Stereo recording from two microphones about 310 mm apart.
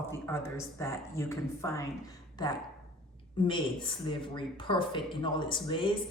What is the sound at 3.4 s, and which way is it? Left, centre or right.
Speech, centre.